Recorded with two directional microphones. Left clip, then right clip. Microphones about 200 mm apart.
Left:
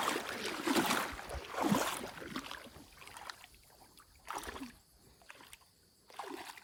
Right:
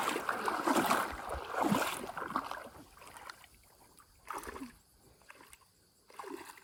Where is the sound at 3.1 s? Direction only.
Centre (ahead or behind).